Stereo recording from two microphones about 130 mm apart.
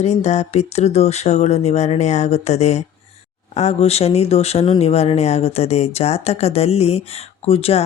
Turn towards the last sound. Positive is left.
turn(degrees=50)  # may be behind; listen again after turning